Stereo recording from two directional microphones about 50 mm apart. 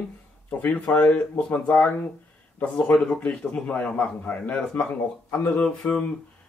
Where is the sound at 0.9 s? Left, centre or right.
Left.